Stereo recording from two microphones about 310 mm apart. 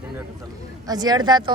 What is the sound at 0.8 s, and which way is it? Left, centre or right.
Speech, centre.